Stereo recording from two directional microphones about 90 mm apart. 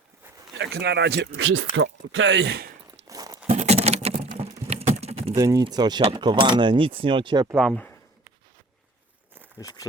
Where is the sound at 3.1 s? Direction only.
45° right (ahead or behind).